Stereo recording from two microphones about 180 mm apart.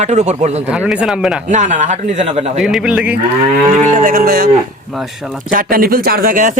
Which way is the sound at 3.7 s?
45° right (ahead or behind).